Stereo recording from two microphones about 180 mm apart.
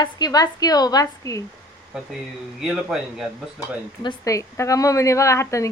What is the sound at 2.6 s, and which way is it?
Speech, 5° right (ahead or behind).